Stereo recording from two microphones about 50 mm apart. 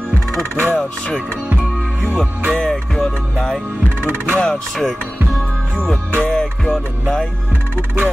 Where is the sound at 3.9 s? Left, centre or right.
Right.